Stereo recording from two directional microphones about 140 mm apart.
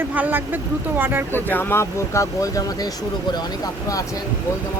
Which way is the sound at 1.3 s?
15° left (ahead or behind).